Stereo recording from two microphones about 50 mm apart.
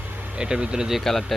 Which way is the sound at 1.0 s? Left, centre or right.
Centre.